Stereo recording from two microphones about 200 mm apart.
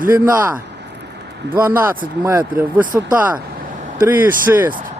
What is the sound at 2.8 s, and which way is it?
Speech, 40° right (ahead or behind).